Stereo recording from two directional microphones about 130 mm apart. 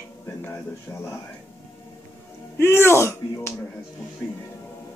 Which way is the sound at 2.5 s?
20° left (ahead or behind).